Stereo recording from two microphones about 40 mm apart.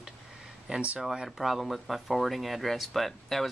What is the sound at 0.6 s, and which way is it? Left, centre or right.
Speech, right.